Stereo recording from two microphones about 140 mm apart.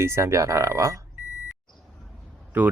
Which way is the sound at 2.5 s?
10° right (ahead or behind).